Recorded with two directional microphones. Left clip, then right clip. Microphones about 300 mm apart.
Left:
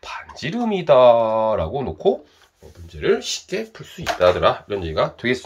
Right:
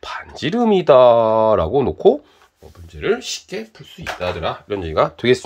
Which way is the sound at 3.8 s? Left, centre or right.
Centre.